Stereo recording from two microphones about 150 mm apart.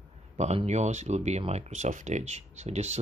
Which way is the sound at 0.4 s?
45° right (ahead or behind).